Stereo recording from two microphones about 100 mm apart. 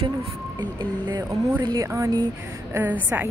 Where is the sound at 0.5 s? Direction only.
50° right (ahead or behind); by 2.2 s 35° right (ahead or behind).